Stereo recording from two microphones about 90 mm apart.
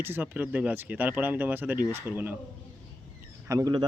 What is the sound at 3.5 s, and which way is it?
Speech, 40° right (ahead or behind).